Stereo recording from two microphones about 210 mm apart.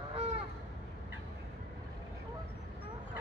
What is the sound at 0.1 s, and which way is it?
Honk, 30° right (ahead or behind).